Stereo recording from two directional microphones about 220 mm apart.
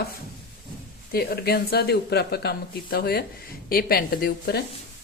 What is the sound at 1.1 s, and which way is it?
Speech, 45° left (ahead or behind).